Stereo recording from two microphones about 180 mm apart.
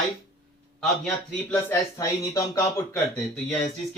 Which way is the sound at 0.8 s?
5° left (ahead or behind).